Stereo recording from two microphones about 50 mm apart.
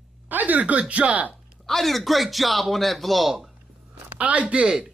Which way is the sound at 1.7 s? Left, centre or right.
Centre.